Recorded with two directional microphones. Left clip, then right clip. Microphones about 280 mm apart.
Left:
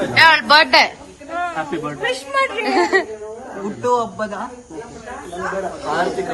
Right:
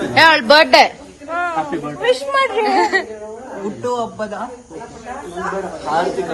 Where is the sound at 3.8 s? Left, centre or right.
Centre.